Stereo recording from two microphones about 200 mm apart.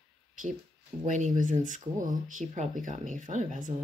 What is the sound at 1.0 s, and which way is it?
Speech, 40° right (ahead or behind).